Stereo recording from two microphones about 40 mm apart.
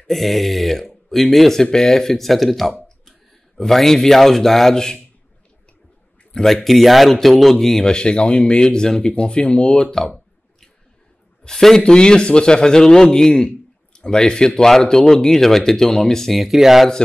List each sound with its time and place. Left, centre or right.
0.0 s speech: centre
6.4 s speech: centre
7.8 s speech: left
11.4 s speech: centre
11.8 s speech: left
16.3 s speech: centre